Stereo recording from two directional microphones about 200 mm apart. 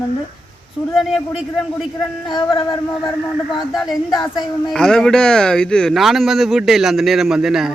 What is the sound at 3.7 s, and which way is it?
Speech, centre (ahead or behind).